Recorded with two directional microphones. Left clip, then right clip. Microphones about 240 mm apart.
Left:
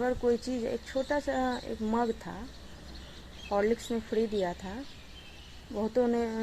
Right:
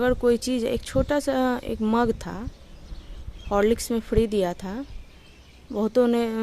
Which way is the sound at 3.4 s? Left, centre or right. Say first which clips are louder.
Right 7 dB; right.